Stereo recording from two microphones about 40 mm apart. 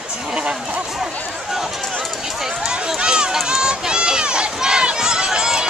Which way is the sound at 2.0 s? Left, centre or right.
Centre.